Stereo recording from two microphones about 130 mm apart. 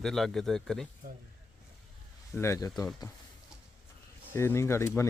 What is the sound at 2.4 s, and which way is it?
Speech, 25° left (ahead or behind).